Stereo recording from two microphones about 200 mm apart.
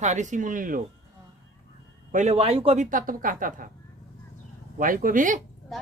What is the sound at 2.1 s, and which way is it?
Speech, 35° right (ahead or behind).